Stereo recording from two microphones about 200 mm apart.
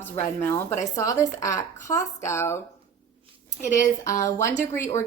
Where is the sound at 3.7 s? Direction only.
15° left (ahead or behind).